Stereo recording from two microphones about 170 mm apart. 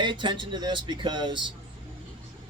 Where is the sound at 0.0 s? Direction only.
30° right (ahead or behind).